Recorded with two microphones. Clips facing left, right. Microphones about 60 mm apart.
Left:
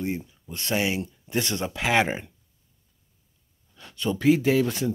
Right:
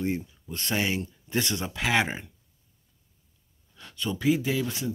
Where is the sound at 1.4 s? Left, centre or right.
Left.